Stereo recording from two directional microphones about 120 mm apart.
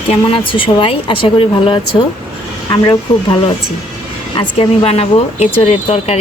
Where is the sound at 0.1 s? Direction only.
45° left (ahead or behind).